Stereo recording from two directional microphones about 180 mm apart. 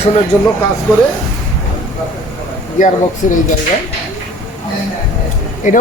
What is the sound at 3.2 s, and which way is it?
Speech, 45° left (ahead or behind).